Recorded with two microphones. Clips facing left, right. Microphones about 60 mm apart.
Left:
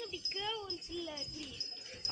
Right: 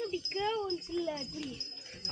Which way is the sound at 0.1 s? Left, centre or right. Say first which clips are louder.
Right 8 dB; right.